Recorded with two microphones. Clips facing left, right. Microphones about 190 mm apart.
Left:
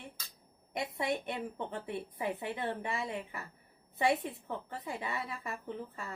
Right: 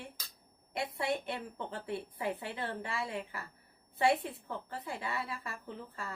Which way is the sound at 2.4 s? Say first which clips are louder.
Left 3 dB; 20° left (ahead or behind).